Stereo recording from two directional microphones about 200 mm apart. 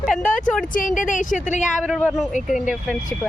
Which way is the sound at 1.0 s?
40° left (ahead or behind).